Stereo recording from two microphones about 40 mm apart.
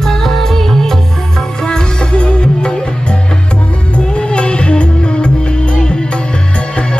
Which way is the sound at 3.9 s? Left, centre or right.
Left.